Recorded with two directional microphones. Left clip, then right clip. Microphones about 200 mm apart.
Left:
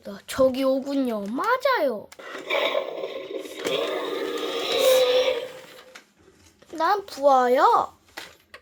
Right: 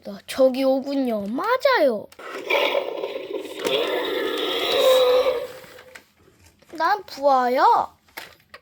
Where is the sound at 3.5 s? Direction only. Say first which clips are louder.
Right 3 dB; 20° right (ahead or behind).